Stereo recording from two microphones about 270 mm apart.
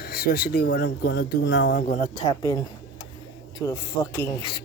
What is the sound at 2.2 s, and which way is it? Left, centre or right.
Speech, centre.